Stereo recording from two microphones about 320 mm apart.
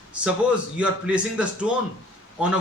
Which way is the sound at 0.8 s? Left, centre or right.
Centre.